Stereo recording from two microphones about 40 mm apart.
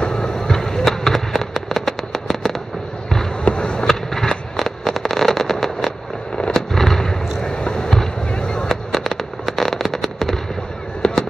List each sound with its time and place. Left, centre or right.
0.0 s fireworks: centre
3.4 s a sound: left
3.8 s fireworks: centre
8.6 s fireworks: centre
11.0 s fireworks: centre